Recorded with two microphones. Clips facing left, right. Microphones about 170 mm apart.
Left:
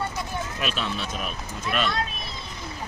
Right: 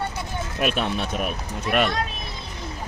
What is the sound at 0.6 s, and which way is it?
Speech, 55° right (ahead or behind).